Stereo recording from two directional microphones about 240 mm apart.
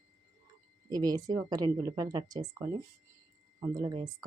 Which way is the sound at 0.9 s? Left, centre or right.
Centre.